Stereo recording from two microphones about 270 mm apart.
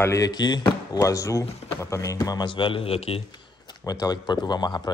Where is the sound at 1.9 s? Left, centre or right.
Centre.